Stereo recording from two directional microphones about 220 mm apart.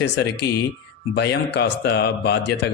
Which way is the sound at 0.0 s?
50° left (ahead or behind).